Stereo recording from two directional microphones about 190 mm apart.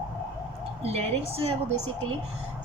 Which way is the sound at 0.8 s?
30° right (ahead or behind).